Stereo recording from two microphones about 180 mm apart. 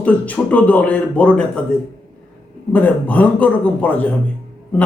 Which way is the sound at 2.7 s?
10° left (ahead or behind).